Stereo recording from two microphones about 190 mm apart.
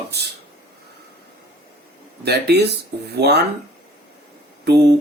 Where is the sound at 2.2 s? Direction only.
60° right (ahead or behind).